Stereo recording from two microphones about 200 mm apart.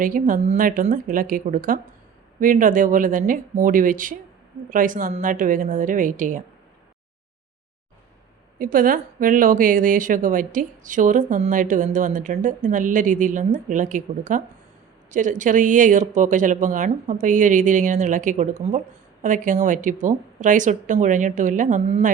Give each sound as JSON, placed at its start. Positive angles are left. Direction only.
{"t": 0.0, "sound": "a woman's voice", "side_deg": -45}
{"t": 8.5, "sound": "a woman's voice", "side_deg": -45}